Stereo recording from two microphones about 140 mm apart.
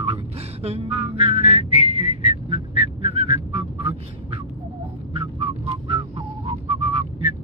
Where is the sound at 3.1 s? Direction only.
45° right (ahead or behind).